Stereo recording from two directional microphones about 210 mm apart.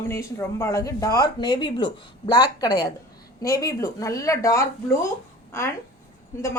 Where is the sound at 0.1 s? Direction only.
15° left (ahead or behind).